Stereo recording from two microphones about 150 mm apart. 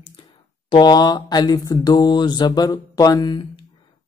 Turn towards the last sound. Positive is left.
turn(degrees=30)  # may be behind; listen again after turning